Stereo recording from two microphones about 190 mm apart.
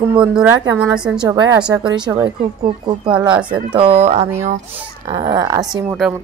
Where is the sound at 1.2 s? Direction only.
20° right (ahead or behind).